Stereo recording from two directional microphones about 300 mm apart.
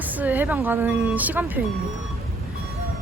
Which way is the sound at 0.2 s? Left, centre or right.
Centre.